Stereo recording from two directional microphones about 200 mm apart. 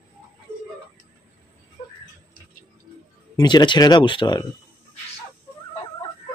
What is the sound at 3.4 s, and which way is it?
Speech, 20° left (ahead or behind).